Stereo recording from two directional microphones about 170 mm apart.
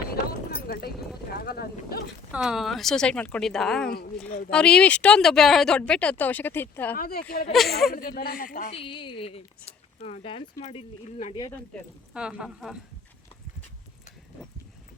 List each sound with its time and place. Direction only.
0.1 s a sound: 65° left (ahead or behind)
1.4 s speech: 65° left (ahead or behind)
2.3 s speech: centre (ahead or behind)
4.3 s speech: 55° left (ahead or behind)
4.5 s speech: 5° left (ahead or behind)
6.9 s speech: 65° left (ahead or behind)
8.7 s speech: 30° left (ahead or behind)
12.1 s speech: 5° right (ahead or behind)